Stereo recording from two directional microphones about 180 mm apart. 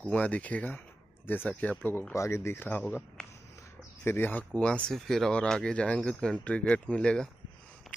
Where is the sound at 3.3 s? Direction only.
15° left (ahead or behind).